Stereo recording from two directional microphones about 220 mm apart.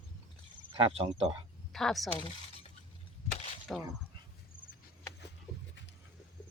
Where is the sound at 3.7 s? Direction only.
5° left (ahead or behind).